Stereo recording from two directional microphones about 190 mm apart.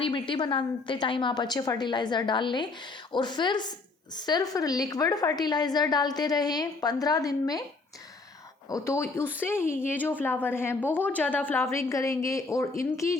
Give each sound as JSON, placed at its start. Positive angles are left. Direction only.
{"t": 0.0, "sound": "a woman's voice", "side_deg": 25}
{"t": 8.7, "sound": "speech", "side_deg": 15}